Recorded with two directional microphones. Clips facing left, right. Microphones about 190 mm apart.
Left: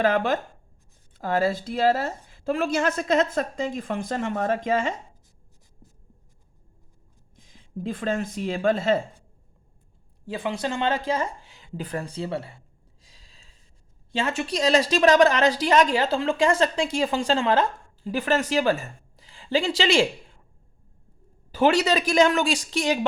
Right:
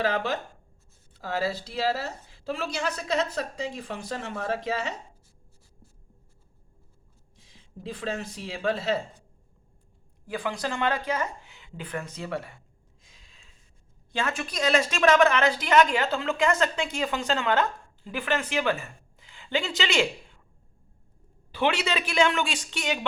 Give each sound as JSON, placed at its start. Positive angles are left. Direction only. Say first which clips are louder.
{"t": 0.0, "sound": "a woman's voice", "louder": "left 5 dB", "side_deg": 50}
{"t": 7.5, "sound": "a woman's voice", "louder": "left 7 dB", "side_deg": 50}
{"t": 10.2, "sound": "a woman's voice", "louder": "left 3 dB", "side_deg": 25}
{"t": 21.5, "sound": "a woman's voice", "louder": "left 6 dB", "side_deg": 40}